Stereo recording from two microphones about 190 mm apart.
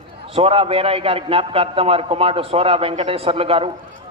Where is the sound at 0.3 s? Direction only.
30° right (ahead or behind).